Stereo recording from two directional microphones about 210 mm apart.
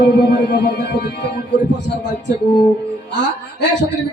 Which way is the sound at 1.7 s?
55° left (ahead or behind).